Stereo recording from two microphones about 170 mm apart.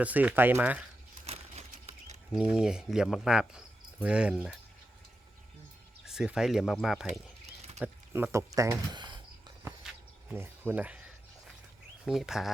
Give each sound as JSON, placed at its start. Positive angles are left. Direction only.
{"t": 0.0, "sound": "speech", "side_deg": -10}
{"t": 1.3, "sound": "a sound", "side_deg": -40}
{"t": 2.3, "sound": "speech", "side_deg": -5}
{"t": 6.1, "sound": "speech", "side_deg": -5}
{"t": 8.1, "sound": "speech", "side_deg": -15}
{"t": 9.8, "sound": "a sound", "side_deg": -10}
{"t": 12.0, "sound": "speech", "side_deg": -5}